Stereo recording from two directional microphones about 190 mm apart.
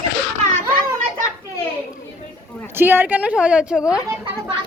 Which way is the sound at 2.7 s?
10° right (ahead or behind).